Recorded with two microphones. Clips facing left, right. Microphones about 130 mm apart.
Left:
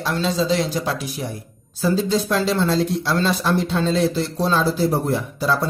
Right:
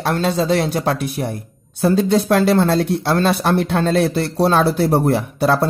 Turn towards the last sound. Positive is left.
turn(degrees=-65)  # may be behind; listen again after turning